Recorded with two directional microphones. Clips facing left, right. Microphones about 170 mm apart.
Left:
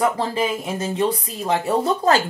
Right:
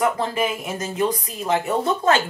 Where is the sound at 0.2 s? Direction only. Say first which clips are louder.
Left 1 dB; 30° left (ahead or behind).